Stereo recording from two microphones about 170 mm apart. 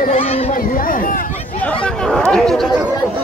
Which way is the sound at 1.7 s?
5° left (ahead or behind).